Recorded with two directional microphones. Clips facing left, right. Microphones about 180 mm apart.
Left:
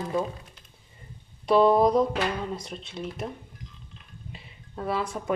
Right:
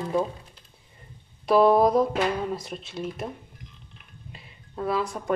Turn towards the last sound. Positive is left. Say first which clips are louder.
# right 2 dB
turn(degrees=0)  # may be behind; listen again after turning